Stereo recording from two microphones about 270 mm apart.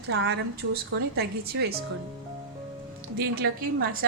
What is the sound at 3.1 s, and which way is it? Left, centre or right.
Speech, right.